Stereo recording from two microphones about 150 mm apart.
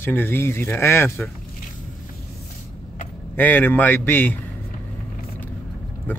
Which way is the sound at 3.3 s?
10° left (ahead or behind).